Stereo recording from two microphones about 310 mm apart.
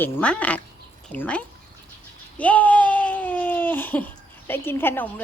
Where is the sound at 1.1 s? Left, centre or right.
Centre.